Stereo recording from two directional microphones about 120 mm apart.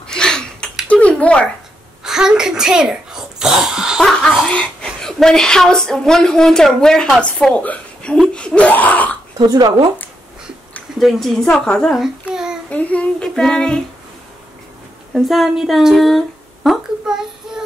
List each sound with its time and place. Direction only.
0.0 s a sound: 5° left (ahead or behind)
2.0 s a child's voice: 5° right (ahead or behind); by 9.2 s 15° left (ahead or behind)
9.4 s speech: 35° right (ahead or behind)
11.0 s a woman's voice: centre (ahead or behind)
12.6 s child singing: 10° left (ahead or behind)
15.1 s speech: centre (ahead or behind)